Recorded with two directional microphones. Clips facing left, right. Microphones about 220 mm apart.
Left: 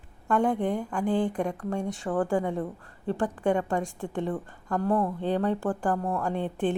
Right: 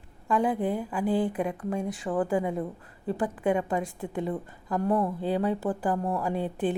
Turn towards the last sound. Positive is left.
turn(degrees=-5)  # may be behind; listen again after turning